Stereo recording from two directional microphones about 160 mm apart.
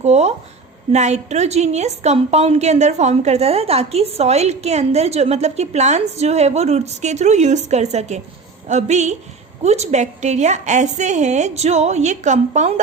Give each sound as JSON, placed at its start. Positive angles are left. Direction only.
{"t": 0.0, "sound": "a woman's voice", "side_deg": -45}